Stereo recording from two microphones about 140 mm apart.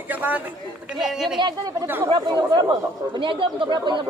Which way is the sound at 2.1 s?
30° right (ahead or behind).